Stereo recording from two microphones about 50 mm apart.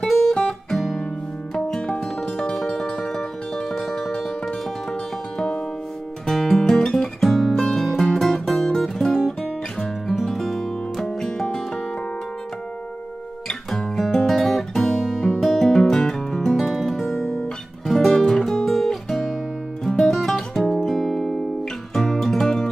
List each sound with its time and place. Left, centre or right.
0.5 s music: centre
6.2 s music: centre
13.7 s guitar: centre
15.0 s music: centre
15.4 s music: centre
17.2 s guitar: left
17.8 s music: centre
18.1 s music: centre
18.4 s guitar: centre
19.8 s music: centre